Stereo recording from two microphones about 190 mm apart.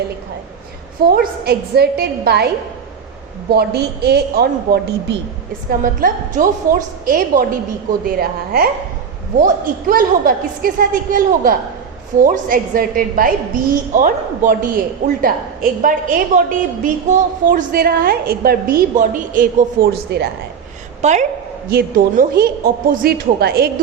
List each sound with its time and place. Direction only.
1.1 s a man's voice: 55° right (ahead or behind)
3.5 s a man's voice: 55° right (ahead or behind)
5.8 s a woman's voice: 45° right (ahead or behind)
9.9 s a woman's voice: 50° right (ahead or behind)
21.0 s a woman's voice: 40° right (ahead or behind)
21.7 s a woman's voice: 50° right (ahead or behind)